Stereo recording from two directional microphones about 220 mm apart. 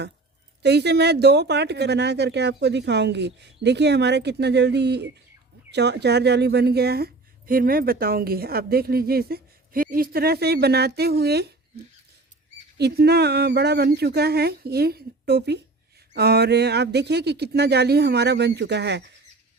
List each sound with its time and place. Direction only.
0.6 s speech: 50° right (ahead or behind)
12.7 s speech: 45° right (ahead or behind)